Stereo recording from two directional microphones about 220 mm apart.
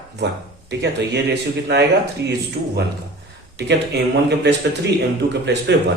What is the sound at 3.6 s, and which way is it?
Speech, 50° right (ahead or behind).